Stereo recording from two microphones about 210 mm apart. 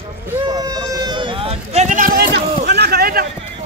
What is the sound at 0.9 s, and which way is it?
Run, 20° right (ahead or behind).